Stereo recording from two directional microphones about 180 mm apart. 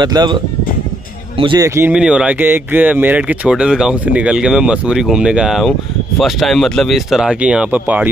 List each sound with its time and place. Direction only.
0.0 s speech: 25° right (ahead or behind)
1.6 s speech: 10° right (ahead or behind)